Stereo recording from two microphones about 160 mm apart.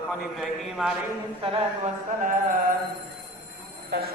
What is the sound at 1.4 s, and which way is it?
Mantra, 35° right (ahead or behind).